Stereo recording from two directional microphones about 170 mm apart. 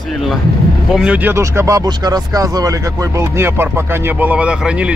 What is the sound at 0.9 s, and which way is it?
Speech, 10° right (ahead or behind).